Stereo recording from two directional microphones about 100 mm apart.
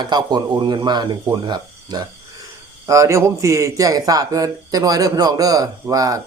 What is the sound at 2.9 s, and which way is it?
A man's voice, 30° right (ahead or behind).